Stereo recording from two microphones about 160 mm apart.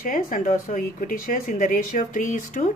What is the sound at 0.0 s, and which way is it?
A woman's voice, 60° left (ahead or behind).